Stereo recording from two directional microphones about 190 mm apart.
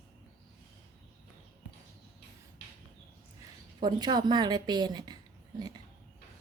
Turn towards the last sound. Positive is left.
turn(degrees=-20)  # may be behind; listen again after turning